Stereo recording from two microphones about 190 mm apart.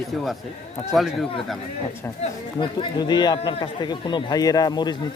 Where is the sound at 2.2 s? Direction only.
25° left (ahead or behind).